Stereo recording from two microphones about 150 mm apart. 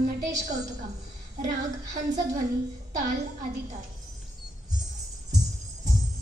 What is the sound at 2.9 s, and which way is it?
Speech, 60° right (ahead or behind).